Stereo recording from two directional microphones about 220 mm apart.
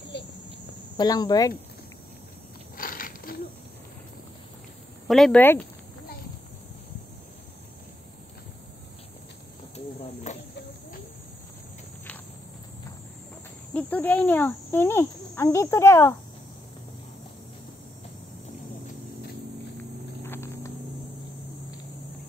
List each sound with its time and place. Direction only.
0.1 s cricket: 50° left (ahead or behind)
0.9 s speech: 15° left (ahead or behind)
2.8 s a sound: 40° left (ahead or behind)
5.0 s speech: centre (ahead or behind)
10.3 s a sound: 30° left (ahead or behind)
13.7 s cricket: 5° left (ahead or behind)
20.2 s vehicle: 10° left (ahead or behind)